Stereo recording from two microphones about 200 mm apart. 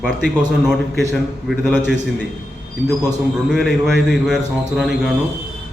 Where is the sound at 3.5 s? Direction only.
Centre (ahead or behind).